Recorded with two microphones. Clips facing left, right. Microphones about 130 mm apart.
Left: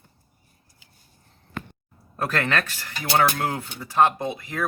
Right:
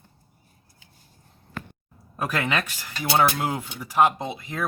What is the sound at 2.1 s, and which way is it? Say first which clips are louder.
Speech: left 1 dB; 10° right (ahead or behind).